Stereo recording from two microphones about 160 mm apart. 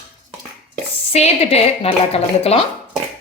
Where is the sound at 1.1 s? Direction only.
40° left (ahead or behind).